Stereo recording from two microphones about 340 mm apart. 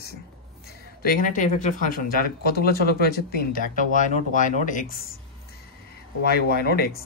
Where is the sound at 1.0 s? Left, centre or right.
Left.